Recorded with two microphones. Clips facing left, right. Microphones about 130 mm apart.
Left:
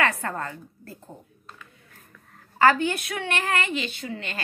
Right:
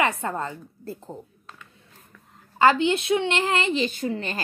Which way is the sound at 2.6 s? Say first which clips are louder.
Right 1 dB; 20° right (ahead or behind).